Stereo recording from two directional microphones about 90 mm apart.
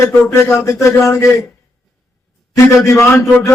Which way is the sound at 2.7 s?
30° left (ahead or behind).